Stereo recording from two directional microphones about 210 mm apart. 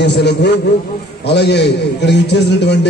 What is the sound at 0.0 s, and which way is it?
A man's voice, 55° left (ahead or behind).